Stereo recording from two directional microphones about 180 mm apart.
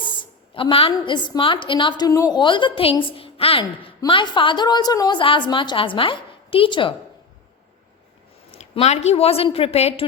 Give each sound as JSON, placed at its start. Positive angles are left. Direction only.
{"t": 0.5, "sound": "a woman's voice", "side_deg": 30}
{"t": 8.5, "sound": "speech", "side_deg": 35}